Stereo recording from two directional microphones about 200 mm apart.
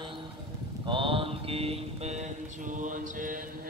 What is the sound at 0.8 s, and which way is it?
Mantra, 25° right (ahead or behind).